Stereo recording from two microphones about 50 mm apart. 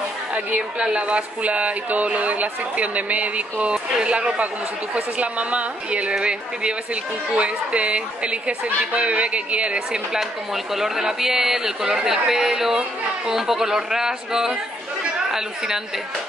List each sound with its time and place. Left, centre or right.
0.3 s a woman's voice: right
9.8 s speech: centre